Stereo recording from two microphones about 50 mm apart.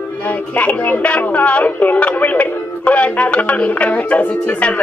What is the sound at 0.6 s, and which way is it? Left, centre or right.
Speech, left.